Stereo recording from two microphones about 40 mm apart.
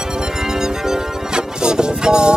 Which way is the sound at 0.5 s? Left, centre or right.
Centre.